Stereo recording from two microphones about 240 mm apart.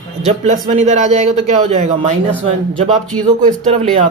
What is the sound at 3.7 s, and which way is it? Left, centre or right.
Speech, right.